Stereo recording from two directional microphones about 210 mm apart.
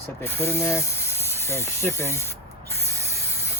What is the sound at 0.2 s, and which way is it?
Speech, 10° left (ahead or behind).